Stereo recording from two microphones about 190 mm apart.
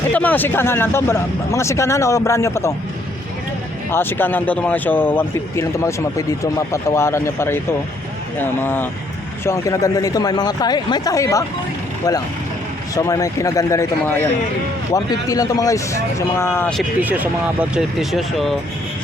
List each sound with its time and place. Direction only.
0.1 s a man's voice: 10° left (ahead or behind)
3.9 s a man's voice: 10° left (ahead or behind)
13.0 s a man's voice: 15° left (ahead or behind)
17.0 s speech: 10° right (ahead or behind)